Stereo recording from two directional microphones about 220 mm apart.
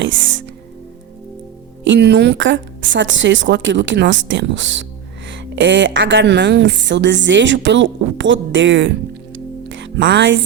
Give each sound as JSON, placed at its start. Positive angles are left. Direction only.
{"t": 0.0, "sound": "music", "side_deg": -60}
{"t": 1.8, "sound": "a woman's voice", "side_deg": -50}